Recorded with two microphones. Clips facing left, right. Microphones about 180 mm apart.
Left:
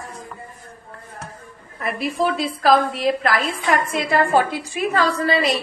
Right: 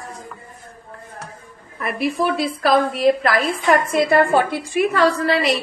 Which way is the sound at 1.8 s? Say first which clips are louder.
Right 1 dB; 65° right (ahead or behind).